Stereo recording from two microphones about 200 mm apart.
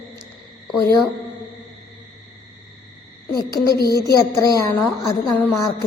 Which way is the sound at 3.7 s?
50° left (ahead or behind).